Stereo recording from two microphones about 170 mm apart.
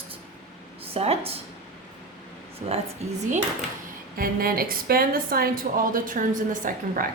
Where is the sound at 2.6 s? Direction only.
45° right (ahead or behind).